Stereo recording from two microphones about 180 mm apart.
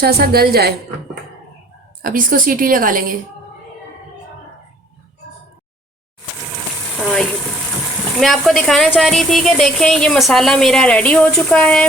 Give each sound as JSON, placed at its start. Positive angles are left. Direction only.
{"t": 0.0, "sound": "a woman's voice", "side_deg": -60}
{"t": 2.0, "sound": "a woman's voice", "side_deg": -50}
{"t": 6.9, "sound": "a sound", "side_deg": 5}
{"t": 8.2, "sound": "a woman's voice", "side_deg": 0}